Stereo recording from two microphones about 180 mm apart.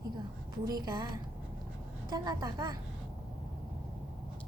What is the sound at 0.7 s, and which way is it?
Speech, 20° right (ahead or behind).